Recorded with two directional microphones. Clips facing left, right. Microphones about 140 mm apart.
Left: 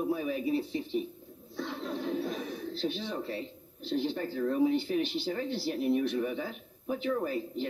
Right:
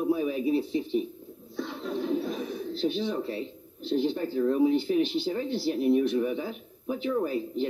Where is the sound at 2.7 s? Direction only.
5° right (ahead or behind).